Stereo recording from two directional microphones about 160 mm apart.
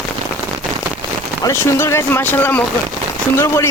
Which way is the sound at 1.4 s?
15° left (ahead or behind).